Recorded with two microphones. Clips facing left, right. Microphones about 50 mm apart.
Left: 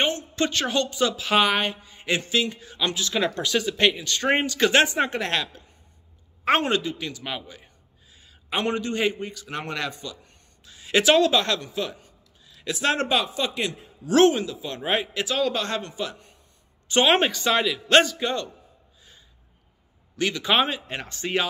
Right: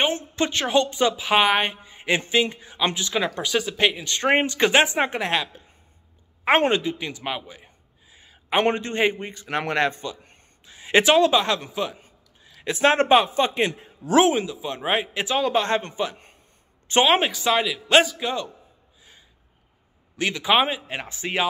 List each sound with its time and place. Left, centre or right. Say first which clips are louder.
0.4 s a woman's voice: right 3 dB; centre
6.7 s a sound: right 2 dB; right
8.5 s a man's voice: right 4 dB; right
12.0 s a man's voice: right 1 dB; right
14.1 s a woman's voice: even; centre
17.0 s a man's voice: even; centre
20.2 s speech: right 2 dB; centre